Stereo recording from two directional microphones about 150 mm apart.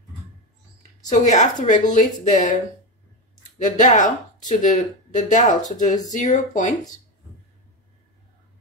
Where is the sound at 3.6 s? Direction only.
55° left (ahead or behind).